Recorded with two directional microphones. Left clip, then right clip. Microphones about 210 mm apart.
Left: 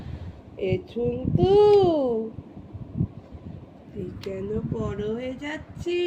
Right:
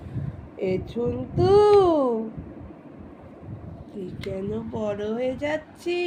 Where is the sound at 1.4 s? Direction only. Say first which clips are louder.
Right 1 dB; 15° right (ahead or behind).